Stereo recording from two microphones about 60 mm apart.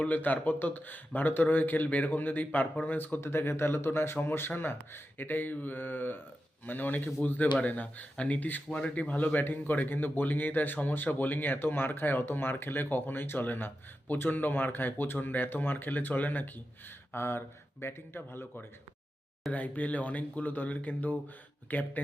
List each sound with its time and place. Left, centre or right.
0.0 s speech: left
3.2 s speech: left
17.1 s speech: left
19.5 s speech: left